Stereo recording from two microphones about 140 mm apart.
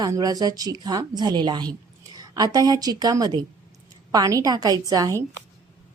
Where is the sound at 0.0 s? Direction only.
25° right (ahead or behind).